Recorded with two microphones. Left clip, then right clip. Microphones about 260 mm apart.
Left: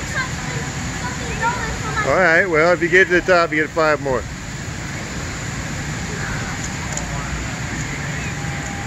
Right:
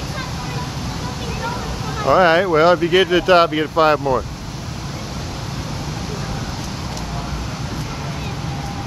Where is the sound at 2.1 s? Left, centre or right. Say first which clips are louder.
Right 2 dB; centre.